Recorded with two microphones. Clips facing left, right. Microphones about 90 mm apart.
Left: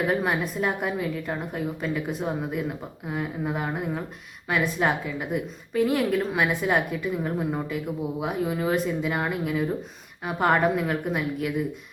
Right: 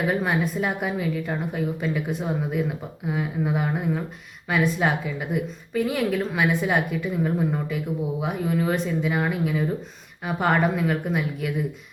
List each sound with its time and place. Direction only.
0.1 s a woman's voice: centre (ahead or behind)